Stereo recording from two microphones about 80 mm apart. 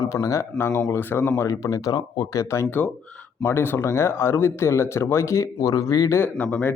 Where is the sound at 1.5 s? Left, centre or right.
Left.